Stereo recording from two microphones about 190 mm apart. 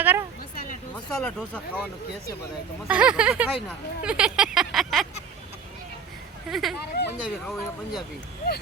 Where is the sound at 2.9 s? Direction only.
5° right (ahead or behind).